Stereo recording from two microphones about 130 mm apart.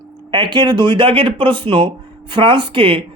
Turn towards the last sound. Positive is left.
turn(degrees=-40)  # may be behind; listen again after turning